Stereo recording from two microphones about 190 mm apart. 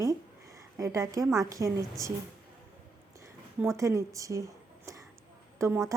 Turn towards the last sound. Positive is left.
turn(degrees=-15)  # may be behind; listen again after turning